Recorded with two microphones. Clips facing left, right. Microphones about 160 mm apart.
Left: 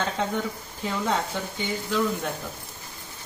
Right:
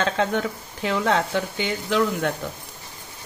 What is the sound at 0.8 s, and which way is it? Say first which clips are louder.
Speech: right 5 dB; 90° right.